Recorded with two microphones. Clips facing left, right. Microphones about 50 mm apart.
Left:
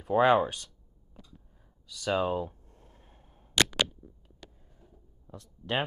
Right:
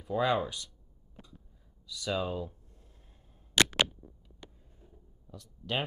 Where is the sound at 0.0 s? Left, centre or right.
Left.